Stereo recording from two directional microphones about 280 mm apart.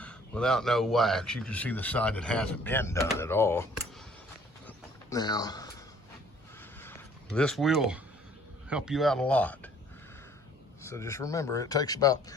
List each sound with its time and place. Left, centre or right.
0.0 s a man's voice: centre
4.6 s a sound: centre
8.7 s a man's voice: centre
10.8 s speech: centre